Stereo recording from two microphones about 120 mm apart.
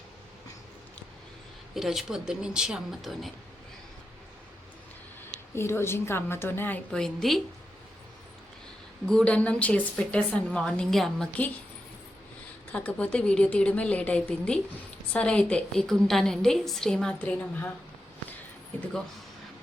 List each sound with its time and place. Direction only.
1.7 s a woman's voice: centre (ahead or behind)
5.5 s a woman's voice: 20° left (ahead or behind); by 7.4 s centre (ahead or behind)
9.0 s a woman's voice: 5° left (ahead or behind)
12.7 s a woman's voice: 10° left (ahead or behind)